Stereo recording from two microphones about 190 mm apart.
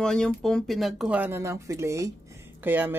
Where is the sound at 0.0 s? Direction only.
5° left (ahead or behind).